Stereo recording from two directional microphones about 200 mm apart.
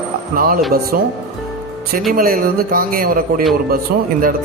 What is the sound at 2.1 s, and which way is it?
A man's voice, 45° right (ahead or behind).